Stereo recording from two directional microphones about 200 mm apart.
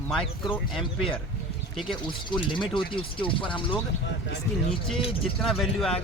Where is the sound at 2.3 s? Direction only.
25° left (ahead or behind).